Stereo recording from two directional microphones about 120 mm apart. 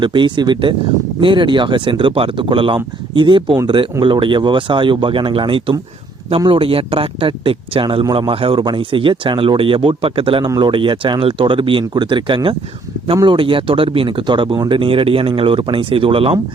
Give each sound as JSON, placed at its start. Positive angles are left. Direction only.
{"t": 0.0, "sound": "speech", "side_deg": -40}